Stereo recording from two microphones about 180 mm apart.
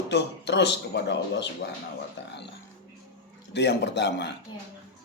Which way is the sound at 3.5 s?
70° left (ahead or behind).